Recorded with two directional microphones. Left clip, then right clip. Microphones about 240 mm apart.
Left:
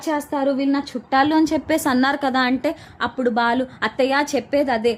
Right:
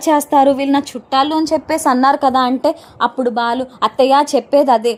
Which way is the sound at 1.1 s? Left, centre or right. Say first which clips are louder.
Right 3 dB; centre.